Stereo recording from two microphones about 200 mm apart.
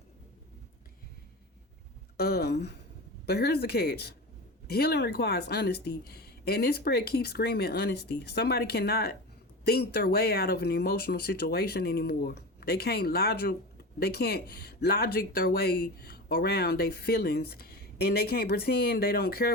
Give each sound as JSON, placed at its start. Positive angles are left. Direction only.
{"t": 2.1, "sound": "speech", "side_deg": 50}